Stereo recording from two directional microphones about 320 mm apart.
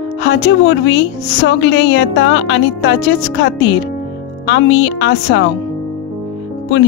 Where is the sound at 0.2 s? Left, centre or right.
Left.